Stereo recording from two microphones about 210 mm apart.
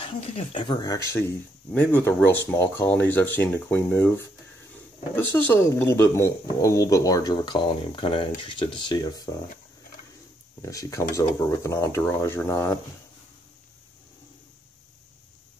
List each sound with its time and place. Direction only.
0.0 s speech: 25° left (ahead or behind)
5.1 s speech: 10° left (ahead or behind)
10.6 s speech: 15° left (ahead or behind)